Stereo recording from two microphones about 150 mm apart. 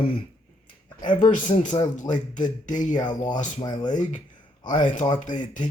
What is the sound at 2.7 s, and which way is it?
Speech, 55° left (ahead or behind).